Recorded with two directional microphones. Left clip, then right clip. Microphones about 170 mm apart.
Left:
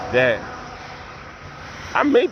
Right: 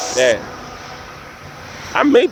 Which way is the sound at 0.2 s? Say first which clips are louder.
Right 3 dB; 35° right (ahead or behind).